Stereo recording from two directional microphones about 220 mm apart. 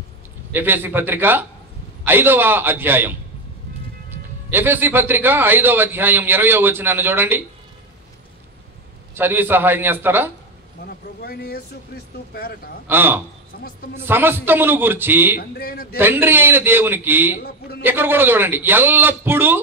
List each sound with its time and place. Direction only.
0.5 s a man's voice: 10° right (ahead or behind)
4.5 s a man's voice: 10° right (ahead or behind)
9.1 s a man's voice: 10° right (ahead or behind)
11.2 s a man's voice: 45° left (ahead or behind)
12.8 s a man's voice: 10° right (ahead or behind)
15.5 s a man's voice: 45° left (ahead or behind)
16.0 s a man's voice: 10° right (ahead or behind)
17.4 s a man's voice: 45° left (ahead or behind)
17.8 s a man's voice: 10° right (ahead or behind)